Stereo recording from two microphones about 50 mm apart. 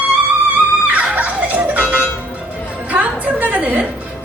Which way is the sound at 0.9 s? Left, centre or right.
Right.